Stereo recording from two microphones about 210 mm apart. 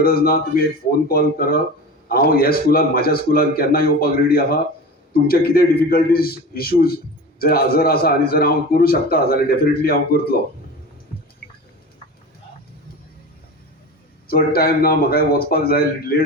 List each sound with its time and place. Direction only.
0.0 s a man's voice: 45° left (ahead or behind)
14.3 s a man's voice: 45° left (ahead or behind)